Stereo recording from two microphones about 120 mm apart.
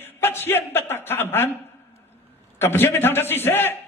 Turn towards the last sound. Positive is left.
turn(degrees=20)  # may be behind; listen again after turning